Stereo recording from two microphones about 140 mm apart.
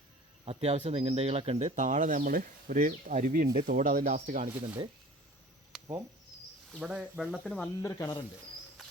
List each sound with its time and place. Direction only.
0.4 s speech: 45° right (ahead or behind)
6.7 s speech: 10° right (ahead or behind)
7.8 s speech: 25° left (ahead or behind)